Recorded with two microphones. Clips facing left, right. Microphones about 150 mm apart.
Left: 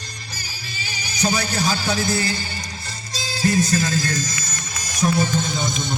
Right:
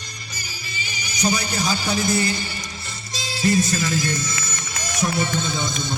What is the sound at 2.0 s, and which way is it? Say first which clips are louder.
Speech: right 1 dB; 20° right (ahead or behind).